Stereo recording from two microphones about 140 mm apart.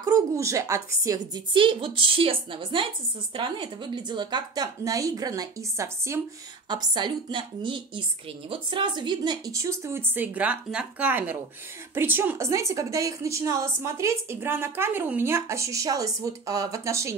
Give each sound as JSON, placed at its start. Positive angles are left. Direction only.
{"t": 0.0, "sound": "a woman's voice", "side_deg": -25}
{"t": 6.7, "sound": "a woman's voice", "side_deg": -30}